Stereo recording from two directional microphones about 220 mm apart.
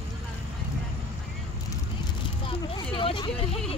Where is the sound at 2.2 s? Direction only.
25° left (ahead or behind).